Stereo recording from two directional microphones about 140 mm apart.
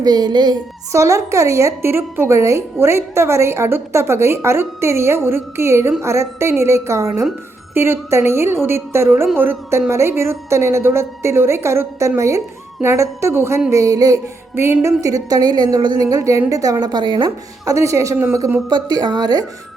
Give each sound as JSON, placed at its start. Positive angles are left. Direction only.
{"t": 0.0, "sound": "a woman's voice", "side_deg": -30}
{"t": 18.7, "sound": "a woman's voice", "side_deg": -30}